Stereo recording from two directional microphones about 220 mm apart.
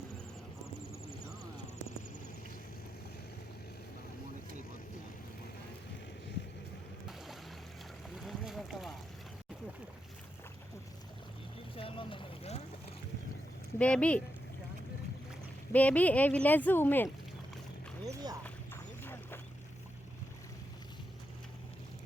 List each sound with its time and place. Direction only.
8.2 s boat: centre (ahead or behind)
11.8 s boat: 25° left (ahead or behind)
13.7 s speech: 5° left (ahead or behind)
15.7 s speech: 5° left (ahead or behind)
18.0 s a sound: 15° right (ahead or behind)
18.4 s duck: 10° left (ahead or behind)